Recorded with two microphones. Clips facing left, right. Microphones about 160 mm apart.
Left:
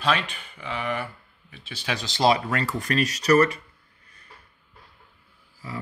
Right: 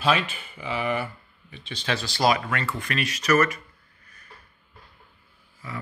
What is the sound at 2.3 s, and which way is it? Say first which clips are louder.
Speech: left 2 dB; 35° left (ahead or behind).